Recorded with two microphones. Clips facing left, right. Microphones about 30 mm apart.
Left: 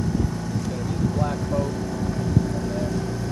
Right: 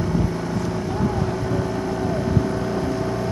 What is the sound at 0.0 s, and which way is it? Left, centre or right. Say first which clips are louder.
Vehicle: right 3 dB; right.